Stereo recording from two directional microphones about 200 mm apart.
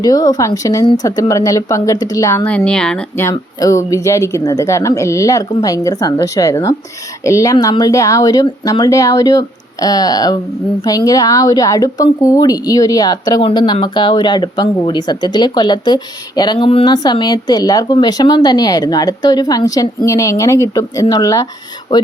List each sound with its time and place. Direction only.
0.0 s speech: 20° left (ahead or behind)